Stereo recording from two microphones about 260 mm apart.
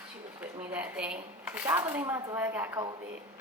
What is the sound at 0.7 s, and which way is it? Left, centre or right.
Speech, centre.